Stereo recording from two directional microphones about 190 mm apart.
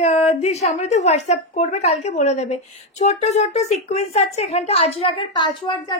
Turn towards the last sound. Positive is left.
turn(degrees=25)  # may be behind; listen again after turning